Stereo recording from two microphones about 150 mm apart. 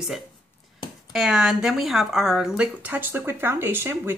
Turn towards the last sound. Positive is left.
turn(degrees=-15)  # may be behind; listen again after turning